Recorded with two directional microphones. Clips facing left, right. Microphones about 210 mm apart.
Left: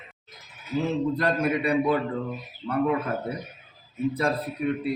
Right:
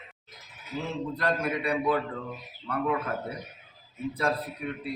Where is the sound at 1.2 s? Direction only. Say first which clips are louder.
Left 4 dB; 20° left (ahead or behind).